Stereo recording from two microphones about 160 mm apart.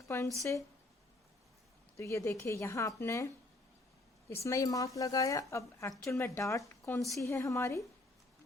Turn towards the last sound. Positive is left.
turn(degrees=20)  # may be behind; listen again after turning